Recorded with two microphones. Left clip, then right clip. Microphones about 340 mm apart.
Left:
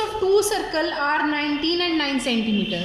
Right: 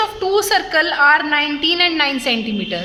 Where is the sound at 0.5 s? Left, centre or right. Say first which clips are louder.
Right 8 dB; right.